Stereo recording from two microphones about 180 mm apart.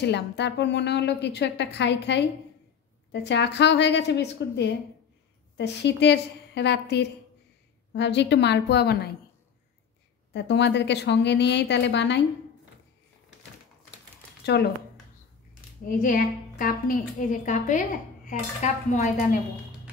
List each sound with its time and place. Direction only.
0.0 s a woman's voice: 70° left (ahead or behind)
10.3 s a woman's voice: 75° left (ahead or behind)
14.4 s speech: 70° left (ahead or behind)
15.9 s a woman's voice: 50° left (ahead or behind)